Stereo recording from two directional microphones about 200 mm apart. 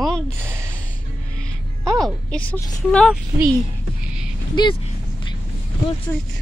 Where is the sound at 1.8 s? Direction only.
Centre (ahead or behind).